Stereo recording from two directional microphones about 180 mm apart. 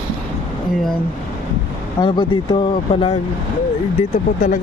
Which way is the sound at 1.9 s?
25° left (ahead or behind).